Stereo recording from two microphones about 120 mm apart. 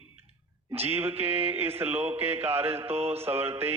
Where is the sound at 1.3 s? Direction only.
55° right (ahead or behind).